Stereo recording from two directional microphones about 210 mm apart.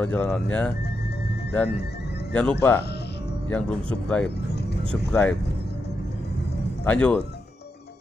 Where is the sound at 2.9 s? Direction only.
50° left (ahead or behind).